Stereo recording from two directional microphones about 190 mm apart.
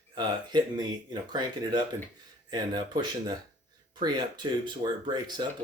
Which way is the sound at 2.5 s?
20° right (ahead or behind).